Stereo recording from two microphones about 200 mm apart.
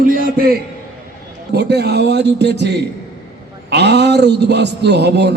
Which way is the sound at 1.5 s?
55° right (ahead or behind).